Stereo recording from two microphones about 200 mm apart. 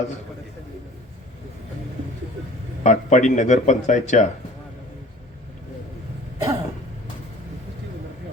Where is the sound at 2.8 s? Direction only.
35° left (ahead or behind).